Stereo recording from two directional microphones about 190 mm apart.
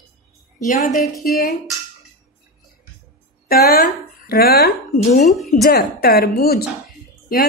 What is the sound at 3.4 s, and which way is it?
Speech, 55° left (ahead or behind).